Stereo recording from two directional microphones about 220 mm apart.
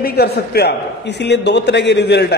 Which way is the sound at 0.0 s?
45° left (ahead or behind).